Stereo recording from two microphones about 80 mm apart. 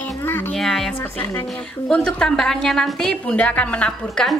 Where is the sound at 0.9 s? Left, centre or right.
Left.